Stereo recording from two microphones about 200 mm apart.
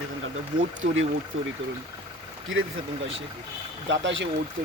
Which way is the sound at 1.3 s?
90° right.